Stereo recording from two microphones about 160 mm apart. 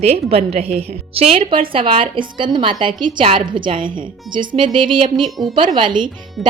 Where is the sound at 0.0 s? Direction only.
40° right (ahead or behind).